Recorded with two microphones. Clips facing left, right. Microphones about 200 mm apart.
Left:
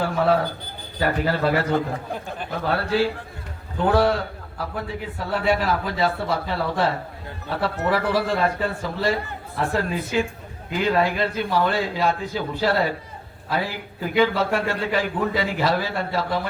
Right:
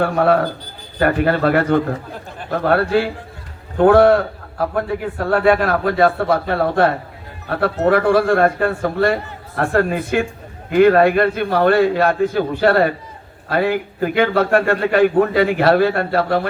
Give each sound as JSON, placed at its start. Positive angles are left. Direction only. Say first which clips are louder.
{"t": 0.0, "sound": "a man's voice", "louder": "right 5 dB", "side_deg": -55}